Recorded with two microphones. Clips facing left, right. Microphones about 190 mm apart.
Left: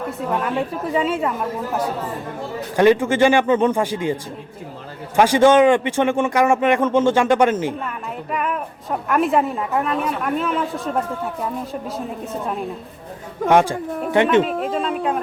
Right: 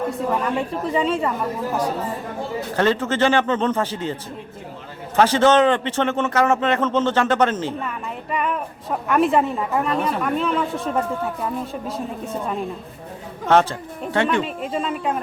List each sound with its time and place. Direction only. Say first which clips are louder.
0.1 s a woman's voice: even; centre (ahead or behind)
2.7 s a man's voice: left 6 dB; 15° left (ahead or behind)
13.5 s speech: left 1 dB; 15° left (ahead or behind)
14.4 s a woman's voice: left 3 dB; centre (ahead or behind)